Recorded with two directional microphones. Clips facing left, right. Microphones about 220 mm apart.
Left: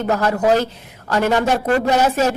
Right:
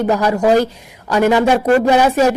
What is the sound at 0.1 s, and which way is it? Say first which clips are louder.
Speech: right 2 dB; 10° right (ahead or behind).